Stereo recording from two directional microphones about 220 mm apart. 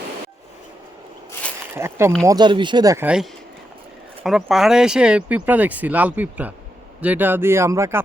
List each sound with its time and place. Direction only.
1.7 s speech: 10° right (ahead or behind)